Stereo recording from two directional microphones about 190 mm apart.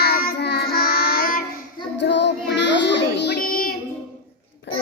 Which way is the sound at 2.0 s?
65° left (ahead or behind).